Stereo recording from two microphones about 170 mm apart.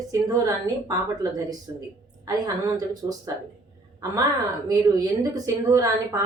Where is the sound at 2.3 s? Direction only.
20° right (ahead or behind).